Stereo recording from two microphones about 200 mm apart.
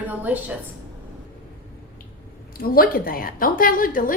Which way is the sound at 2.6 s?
50° left (ahead or behind).